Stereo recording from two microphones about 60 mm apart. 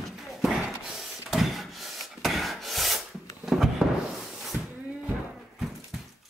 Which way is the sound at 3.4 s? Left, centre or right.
Centre.